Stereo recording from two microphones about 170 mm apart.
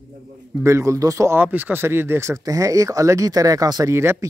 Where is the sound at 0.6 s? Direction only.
15° right (ahead or behind).